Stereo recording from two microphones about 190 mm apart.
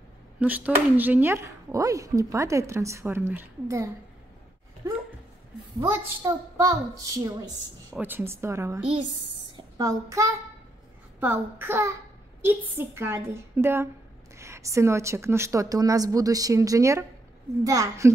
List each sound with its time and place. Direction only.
0.4 s speech: 10° right (ahead or behind)
5.8 s speech: 15° right (ahead or behind)